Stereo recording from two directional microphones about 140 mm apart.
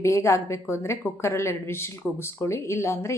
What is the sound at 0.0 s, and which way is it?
Speech, 20° left (ahead or behind).